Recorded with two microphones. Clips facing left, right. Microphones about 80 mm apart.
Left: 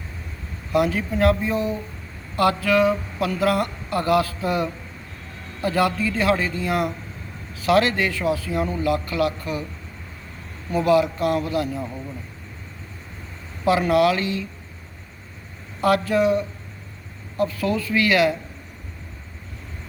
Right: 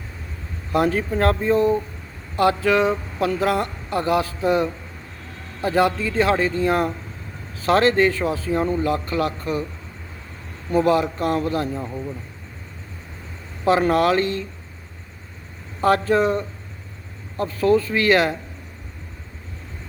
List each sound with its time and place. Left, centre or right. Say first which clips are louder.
0.7 s speech: right 1 dB; right
2.3 s speech: right 1 dB; right
10.7 s speech: even; right
13.7 s speech: right 1 dB; right
15.8 s speech: right 1 dB; right